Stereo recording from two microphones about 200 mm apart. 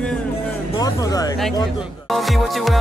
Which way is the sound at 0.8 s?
20° left (ahead or behind).